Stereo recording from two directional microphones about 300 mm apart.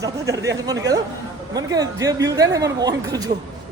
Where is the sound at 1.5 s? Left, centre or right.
Centre.